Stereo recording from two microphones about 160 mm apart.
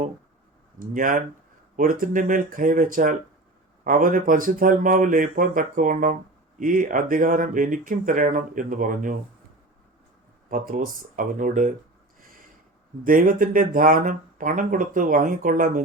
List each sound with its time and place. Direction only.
0.8 s speech: 55° right (ahead or behind)
10.5 s speech: 60° right (ahead or behind)
12.2 s a sound: 60° right (ahead or behind)
13.1 s speech: 60° right (ahead or behind)